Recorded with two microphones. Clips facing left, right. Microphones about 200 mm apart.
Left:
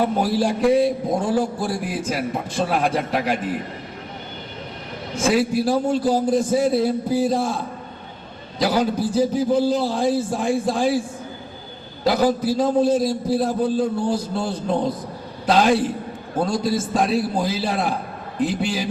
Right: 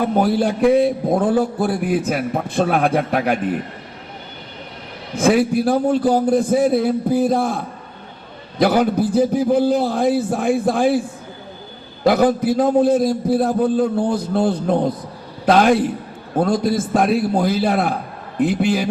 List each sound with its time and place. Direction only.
0.0 s a man's voice: 55° right (ahead or behind)
5.2 s a man's voice: 55° right (ahead or behind)
12.0 s a man's voice: 55° right (ahead or behind)